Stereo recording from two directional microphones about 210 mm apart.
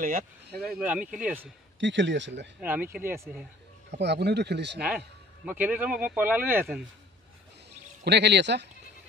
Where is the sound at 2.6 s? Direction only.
10° right (ahead or behind).